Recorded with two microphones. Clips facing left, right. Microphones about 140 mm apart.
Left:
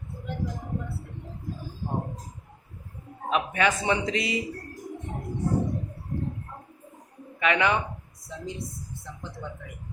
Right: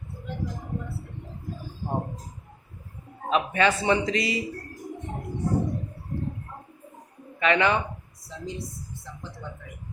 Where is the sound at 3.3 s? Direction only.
10° left (ahead or behind).